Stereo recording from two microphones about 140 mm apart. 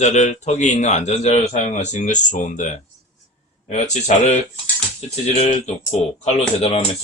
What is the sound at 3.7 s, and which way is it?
Speech, 55° left (ahead or behind).